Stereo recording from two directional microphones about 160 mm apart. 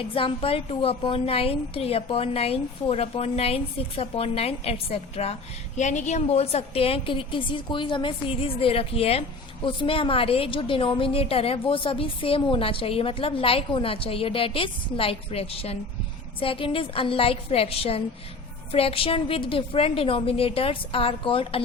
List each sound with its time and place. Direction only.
0.1 s a woman's voice: 35° left (ahead or behind)